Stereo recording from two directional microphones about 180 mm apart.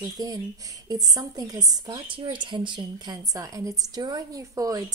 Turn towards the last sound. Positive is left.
turn(degrees=-20)  # may be behind; listen again after turning